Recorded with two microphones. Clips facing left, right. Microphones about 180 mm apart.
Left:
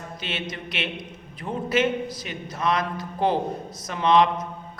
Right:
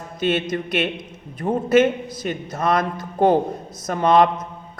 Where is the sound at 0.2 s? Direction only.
50° right (ahead or behind).